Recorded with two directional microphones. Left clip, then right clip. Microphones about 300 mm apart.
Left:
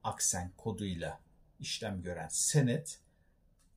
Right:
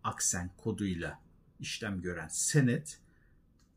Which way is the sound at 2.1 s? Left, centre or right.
Centre.